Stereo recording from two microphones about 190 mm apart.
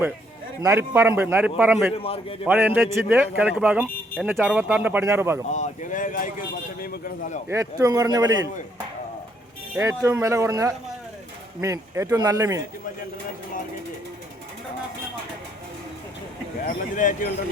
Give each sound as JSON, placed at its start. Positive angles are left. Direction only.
{"t": 0.6, "sound": "a man's voice", "side_deg": -15}
{"t": 2.0, "sound": "a man's voice", "side_deg": 30}
{"t": 2.5, "sound": "a man's voice", "side_deg": -10}
{"t": 5.5, "sound": "speech", "side_deg": 40}
{"t": 7.4, "sound": "a man's voice", "side_deg": -15}
{"t": 9.7, "sound": "a man's voice", "side_deg": -15}
{"t": 16.6, "sound": "speech", "side_deg": 45}